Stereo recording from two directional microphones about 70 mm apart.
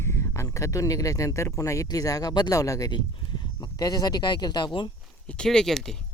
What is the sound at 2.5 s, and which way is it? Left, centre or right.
Speech, left.